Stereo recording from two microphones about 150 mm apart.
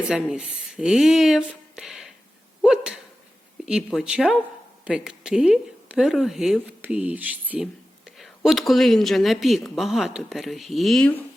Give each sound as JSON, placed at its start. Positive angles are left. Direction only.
{"t": 0.1, "sound": "speech", "side_deg": -5}